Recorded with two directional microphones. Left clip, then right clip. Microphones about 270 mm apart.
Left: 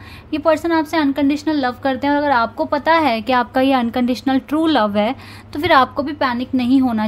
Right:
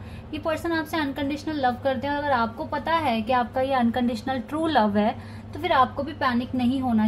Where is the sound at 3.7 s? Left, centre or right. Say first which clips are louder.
Left 6 dB; left.